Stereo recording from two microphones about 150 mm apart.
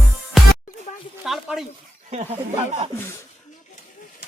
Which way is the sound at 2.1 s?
45° right (ahead or behind).